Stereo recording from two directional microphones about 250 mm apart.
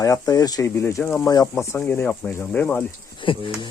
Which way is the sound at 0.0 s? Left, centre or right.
Centre.